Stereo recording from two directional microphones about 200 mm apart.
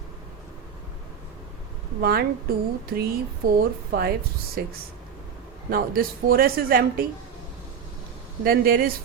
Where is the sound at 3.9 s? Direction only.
50° right (ahead or behind).